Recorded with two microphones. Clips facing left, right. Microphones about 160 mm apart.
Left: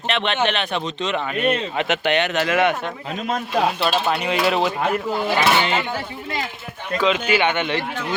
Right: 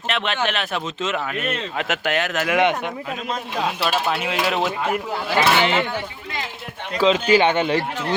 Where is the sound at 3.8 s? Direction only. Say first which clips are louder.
Left 1 dB; 5° right (ahead or behind).